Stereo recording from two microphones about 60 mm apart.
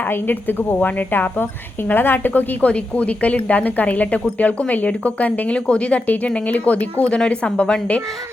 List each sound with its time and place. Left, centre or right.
0.0 s a woman's voice: left